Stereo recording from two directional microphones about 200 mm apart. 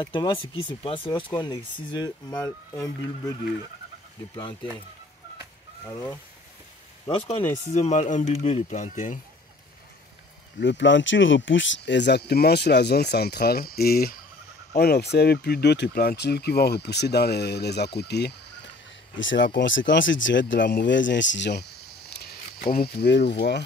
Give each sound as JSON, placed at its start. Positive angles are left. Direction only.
{"t": 0.0, "sound": "speech", "side_deg": 25}
{"t": 5.9, "sound": "speech", "side_deg": 15}
{"t": 7.1, "sound": "speech", "side_deg": 30}
{"t": 10.6, "sound": "speech", "side_deg": 65}
{"t": 19.1, "sound": "speech", "side_deg": 70}